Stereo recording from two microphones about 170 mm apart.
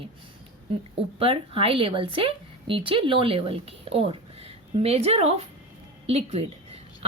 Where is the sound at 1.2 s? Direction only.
35° right (ahead or behind).